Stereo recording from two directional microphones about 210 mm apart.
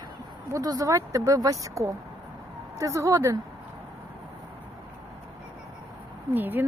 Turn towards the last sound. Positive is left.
turn(degrees=-10)  # may be behind; listen again after turning